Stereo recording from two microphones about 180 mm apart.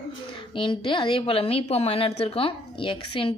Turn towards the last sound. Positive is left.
turn(degrees=30)  # may be behind; listen again after turning